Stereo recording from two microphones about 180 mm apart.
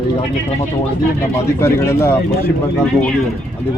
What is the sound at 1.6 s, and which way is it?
Speech, 15° left (ahead or behind).